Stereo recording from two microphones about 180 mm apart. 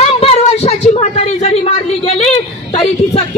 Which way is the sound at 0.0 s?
35° left (ahead or behind).